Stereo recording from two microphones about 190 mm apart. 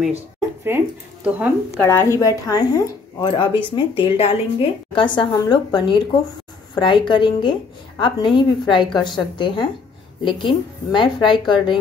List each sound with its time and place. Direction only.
0.7 s speech: 10° right (ahead or behind)
1.8 s a woman's voice: 15° left (ahead or behind)